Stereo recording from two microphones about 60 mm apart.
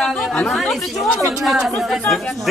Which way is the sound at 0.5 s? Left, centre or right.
Centre.